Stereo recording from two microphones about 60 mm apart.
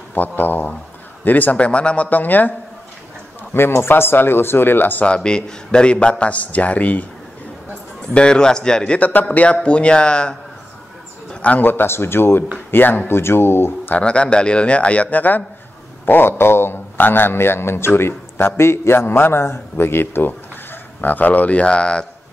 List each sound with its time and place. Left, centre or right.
0.1 s a man's voice: left
3.5 s a man's voice: left
5.0 s a man's voice: centre
8.1 s a man's voice: centre
11.4 s a man's voice: left
13.2 s speech: left
13.9 s a man's voice: centre